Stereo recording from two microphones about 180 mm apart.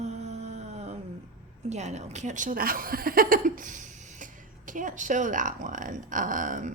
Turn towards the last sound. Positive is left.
turn(degrees=-45)  # may be behind; listen again after turning